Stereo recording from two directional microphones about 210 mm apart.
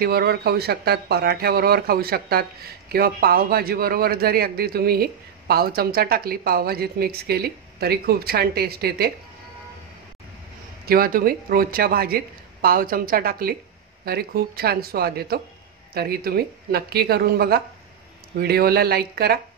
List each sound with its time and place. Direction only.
0.0 s speech: 50° right (ahead or behind)
10.9 s speech: 45° right (ahead or behind)